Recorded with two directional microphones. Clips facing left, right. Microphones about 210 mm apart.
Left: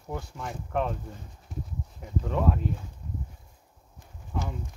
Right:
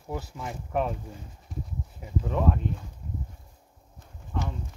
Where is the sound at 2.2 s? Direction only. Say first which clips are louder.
Even; centre (ahead or behind).